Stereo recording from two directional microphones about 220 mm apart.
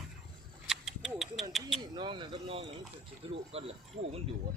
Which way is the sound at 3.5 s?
25° right (ahead or behind).